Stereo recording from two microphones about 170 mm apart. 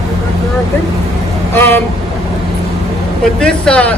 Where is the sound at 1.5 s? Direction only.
10° left (ahead or behind).